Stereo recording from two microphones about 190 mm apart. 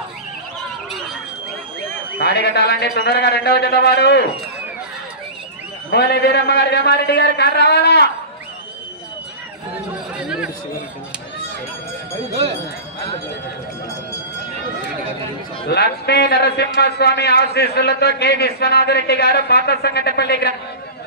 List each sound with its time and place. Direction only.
2.1 s a man's voice: 60° left (ahead or behind)
5.9 s a man's voice: 60° left (ahead or behind)
10.1 s chatter: 5° right (ahead or behind)
15.7 s a man's voice: 60° left (ahead or behind)